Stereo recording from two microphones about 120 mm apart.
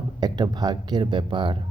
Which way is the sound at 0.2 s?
35° right (ahead or behind).